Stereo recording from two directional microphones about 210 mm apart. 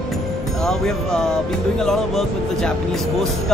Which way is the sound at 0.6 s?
Centre (ahead or behind).